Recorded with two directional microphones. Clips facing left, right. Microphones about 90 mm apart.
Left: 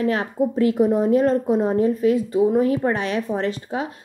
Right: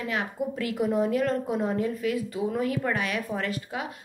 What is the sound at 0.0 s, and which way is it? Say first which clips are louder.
A woman's voice: left 9 dB; 35° left (ahead or behind).